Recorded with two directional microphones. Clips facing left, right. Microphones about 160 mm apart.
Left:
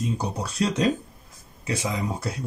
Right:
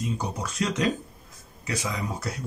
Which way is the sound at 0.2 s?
35° left (ahead or behind).